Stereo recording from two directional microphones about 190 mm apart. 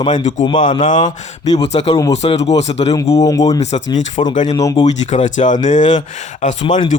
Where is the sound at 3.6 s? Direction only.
35° left (ahead or behind).